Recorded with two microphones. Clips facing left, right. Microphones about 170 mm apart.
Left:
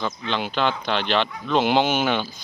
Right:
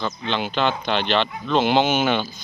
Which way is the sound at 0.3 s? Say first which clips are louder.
Right 1 dB; 5° left (ahead or behind).